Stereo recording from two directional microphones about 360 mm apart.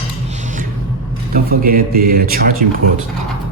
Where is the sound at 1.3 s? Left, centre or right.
Right.